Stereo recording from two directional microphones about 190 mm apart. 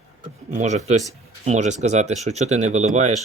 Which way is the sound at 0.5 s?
35° right (ahead or behind).